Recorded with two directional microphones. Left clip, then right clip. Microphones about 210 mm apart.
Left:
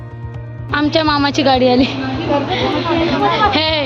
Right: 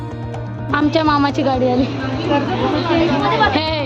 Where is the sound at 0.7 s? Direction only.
10° right (ahead or behind).